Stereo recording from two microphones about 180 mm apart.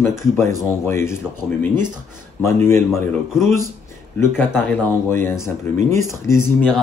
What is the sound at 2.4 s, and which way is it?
Speech, 15° left (ahead or behind).